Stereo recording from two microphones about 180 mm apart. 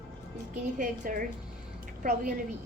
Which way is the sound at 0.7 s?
50° right (ahead or behind).